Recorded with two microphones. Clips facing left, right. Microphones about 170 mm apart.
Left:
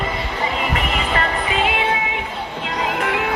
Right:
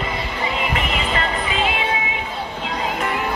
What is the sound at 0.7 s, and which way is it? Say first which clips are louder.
Music: left 1 dB; 45° left (ahead or behind).